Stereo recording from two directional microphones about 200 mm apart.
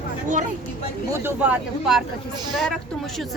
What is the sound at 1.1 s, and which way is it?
Speech, 10° right (ahead or behind).